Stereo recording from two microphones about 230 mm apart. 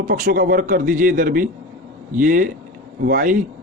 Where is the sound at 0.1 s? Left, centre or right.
Right.